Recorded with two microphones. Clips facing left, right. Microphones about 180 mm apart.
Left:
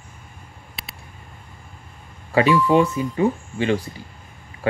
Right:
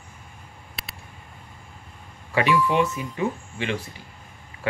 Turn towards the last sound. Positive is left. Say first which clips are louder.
# left 5 dB
turn(degrees=30)  # may be behind; listen again after turning